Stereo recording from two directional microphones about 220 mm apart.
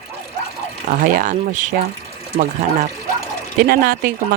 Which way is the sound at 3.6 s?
45° right (ahead or behind).